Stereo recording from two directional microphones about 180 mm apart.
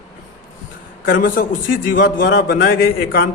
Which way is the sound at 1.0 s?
55° left (ahead or behind).